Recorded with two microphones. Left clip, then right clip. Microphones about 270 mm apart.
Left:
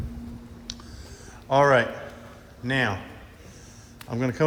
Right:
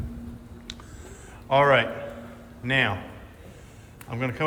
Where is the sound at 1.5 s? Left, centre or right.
Centre.